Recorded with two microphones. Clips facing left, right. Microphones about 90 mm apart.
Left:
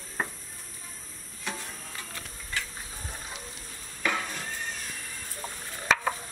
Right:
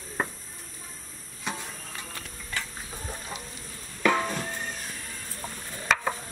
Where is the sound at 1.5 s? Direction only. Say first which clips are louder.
Right 2 dB; 20° right (ahead or behind).